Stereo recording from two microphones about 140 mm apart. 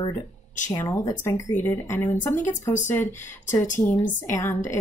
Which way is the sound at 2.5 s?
60° left (ahead or behind).